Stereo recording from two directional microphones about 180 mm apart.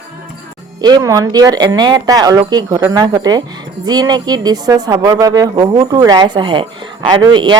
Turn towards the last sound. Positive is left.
turn(degrees=-25)  # may be behind; listen again after turning